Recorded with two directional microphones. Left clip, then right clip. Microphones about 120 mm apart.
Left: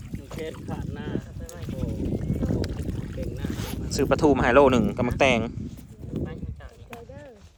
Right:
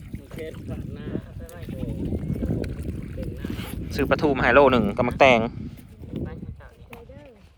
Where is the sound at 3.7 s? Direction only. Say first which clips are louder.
Right 1 dB; 25° left (ahead or behind); by 5.6 s 10° left (ahead or behind).